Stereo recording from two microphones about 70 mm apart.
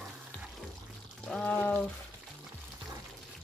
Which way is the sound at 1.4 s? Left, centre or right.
Left.